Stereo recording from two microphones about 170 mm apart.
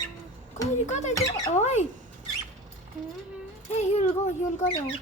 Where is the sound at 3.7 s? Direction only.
40° left (ahead or behind).